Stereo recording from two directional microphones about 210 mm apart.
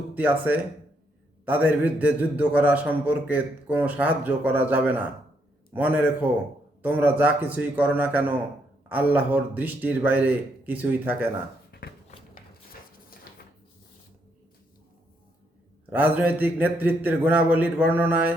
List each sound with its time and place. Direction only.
0.1 s a man's voice: 10° right (ahead or behind)
13.3 s a sound: 45° left (ahead or behind)
15.9 s a man's voice: 5° right (ahead or behind)